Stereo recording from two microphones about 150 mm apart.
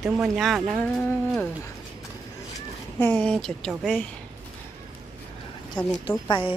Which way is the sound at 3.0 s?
10° left (ahead or behind).